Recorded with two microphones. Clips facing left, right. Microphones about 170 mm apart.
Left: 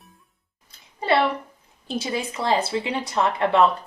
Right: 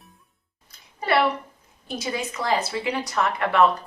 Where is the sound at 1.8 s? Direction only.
30° left (ahead or behind).